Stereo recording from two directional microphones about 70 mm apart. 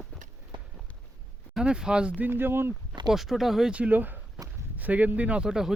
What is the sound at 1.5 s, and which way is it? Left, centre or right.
Speech, centre.